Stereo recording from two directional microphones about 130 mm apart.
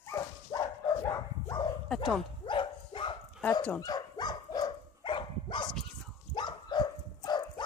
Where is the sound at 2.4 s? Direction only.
40° left (ahead or behind).